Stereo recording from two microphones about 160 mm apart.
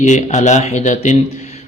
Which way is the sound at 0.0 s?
50° left (ahead or behind).